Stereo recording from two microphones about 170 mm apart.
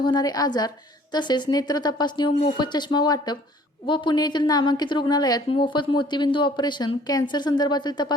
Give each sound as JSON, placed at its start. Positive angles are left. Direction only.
{"t": 0.0, "sound": "a woman's voice", "side_deg": 25}